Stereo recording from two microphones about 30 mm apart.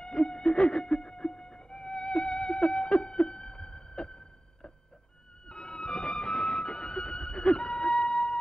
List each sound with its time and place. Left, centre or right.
0.0 s music: left